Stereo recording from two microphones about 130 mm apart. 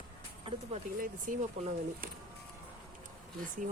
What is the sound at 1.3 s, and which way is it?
Speech, 90° right.